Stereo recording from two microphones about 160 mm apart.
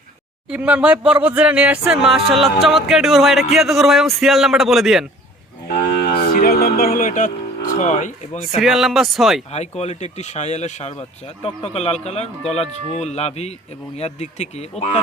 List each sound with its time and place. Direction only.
0.5 s speech: 10° right (ahead or behind)
6.1 s music: 75° left (ahead or behind); by 8.4 s 45° left (ahead or behind)
8.6 s speech: centre (ahead or behind)
9.5 s speech: 40° left (ahead or behind)